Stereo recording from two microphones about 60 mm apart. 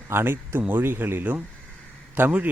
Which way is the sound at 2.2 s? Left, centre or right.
Right.